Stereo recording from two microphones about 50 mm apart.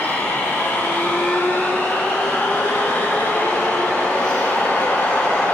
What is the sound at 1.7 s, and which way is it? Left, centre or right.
Train, left.